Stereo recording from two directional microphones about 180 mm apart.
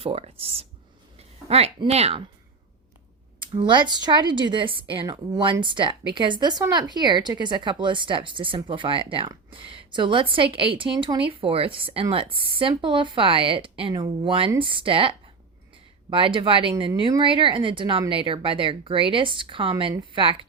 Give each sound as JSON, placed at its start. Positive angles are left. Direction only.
{"t": 0.0, "sound": "speech", "side_deg": -30}
{"t": 3.4, "sound": "speech", "side_deg": -25}